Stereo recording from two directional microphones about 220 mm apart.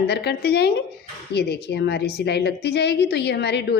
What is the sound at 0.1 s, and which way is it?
A woman's voice, 50° left (ahead or behind).